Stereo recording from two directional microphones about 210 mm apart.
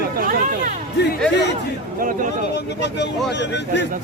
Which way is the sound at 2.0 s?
40° right (ahead or behind).